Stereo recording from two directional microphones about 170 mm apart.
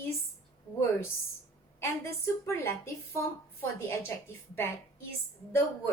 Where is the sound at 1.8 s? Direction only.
15° left (ahead or behind).